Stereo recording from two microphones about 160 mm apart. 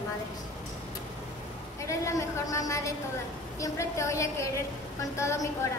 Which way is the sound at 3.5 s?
20° left (ahead or behind).